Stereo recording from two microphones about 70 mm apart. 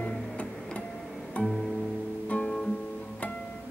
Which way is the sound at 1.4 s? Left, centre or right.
Centre.